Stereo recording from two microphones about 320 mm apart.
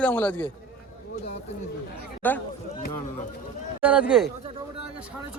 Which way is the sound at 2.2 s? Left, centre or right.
Centre.